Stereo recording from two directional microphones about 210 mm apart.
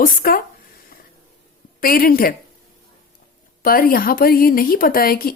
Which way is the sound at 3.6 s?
45° left (ahead or behind).